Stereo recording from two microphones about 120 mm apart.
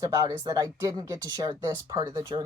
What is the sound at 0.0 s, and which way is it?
Speech, 30° right (ahead or behind).